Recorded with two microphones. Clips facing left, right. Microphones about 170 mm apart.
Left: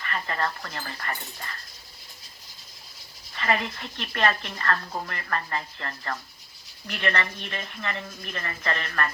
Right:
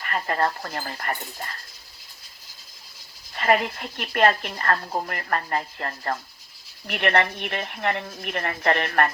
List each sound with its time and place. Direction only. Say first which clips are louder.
0.1 s speech: right 5 dB; 45° right (ahead or behind)
3.3 s speech: right 5 dB; 50° right (ahead or behind)
6.8 s speech: right 6 dB; 55° right (ahead or behind)